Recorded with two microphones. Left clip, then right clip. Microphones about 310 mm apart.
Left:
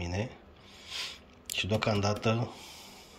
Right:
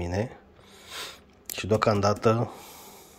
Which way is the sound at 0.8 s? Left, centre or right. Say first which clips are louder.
Even; centre.